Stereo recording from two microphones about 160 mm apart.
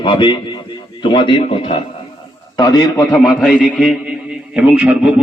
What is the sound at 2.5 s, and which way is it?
Speech, 25° left (ahead or behind).